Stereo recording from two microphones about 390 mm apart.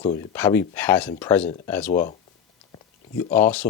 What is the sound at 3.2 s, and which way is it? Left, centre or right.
Speech, centre.